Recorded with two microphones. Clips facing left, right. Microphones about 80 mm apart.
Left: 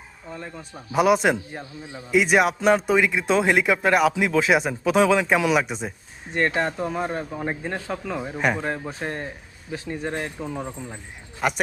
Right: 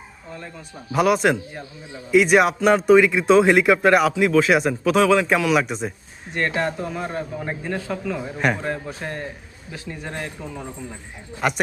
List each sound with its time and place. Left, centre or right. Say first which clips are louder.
0.9 s speech: right 1 dB; centre
4.1 s speech: right 3 dB; centre
6.3 s a man's voice: even; left
8.2 s speech: even; centre
8.6 s a man's voice: even; left
11.3 s speech: right 2 dB; centre